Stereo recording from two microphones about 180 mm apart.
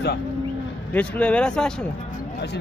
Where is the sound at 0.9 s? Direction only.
10° left (ahead or behind).